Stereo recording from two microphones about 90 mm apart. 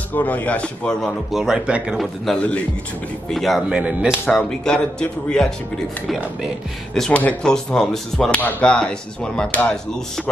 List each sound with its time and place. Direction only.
0.1 s speech: 15° left (ahead or behind)
1.3 s speech: 5° right (ahead or behind)
2.2 s speech: 15° left (ahead or behind)
3.3 s speech: centre (ahead or behind)
3.6 s speech: 10° right (ahead or behind)
4.3 s speech: 10° left (ahead or behind)
7.1 s speech: 15° left (ahead or behind)
8.4 s speech: 15° left (ahead or behind)